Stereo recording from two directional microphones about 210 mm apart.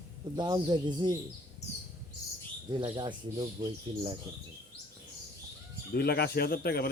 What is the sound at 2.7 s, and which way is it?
Speech, 20° right (ahead or behind).